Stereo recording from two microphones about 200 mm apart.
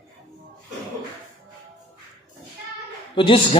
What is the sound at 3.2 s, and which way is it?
Speech, 25° left (ahead or behind).